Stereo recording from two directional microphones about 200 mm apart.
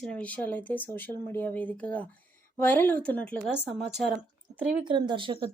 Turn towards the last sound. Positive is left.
turn(degrees=-25)  # may be behind; listen again after turning